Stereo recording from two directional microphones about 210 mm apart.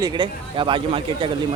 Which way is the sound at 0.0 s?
20° right (ahead or behind).